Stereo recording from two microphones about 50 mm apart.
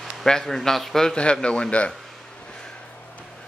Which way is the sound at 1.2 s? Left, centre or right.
Left.